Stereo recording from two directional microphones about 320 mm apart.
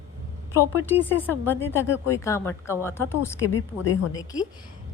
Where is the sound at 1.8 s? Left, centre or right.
Left.